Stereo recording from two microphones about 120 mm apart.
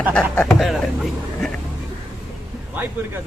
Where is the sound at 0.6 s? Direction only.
Centre (ahead or behind).